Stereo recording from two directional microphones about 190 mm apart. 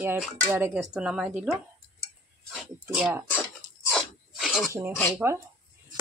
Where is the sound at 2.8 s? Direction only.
5° right (ahead or behind).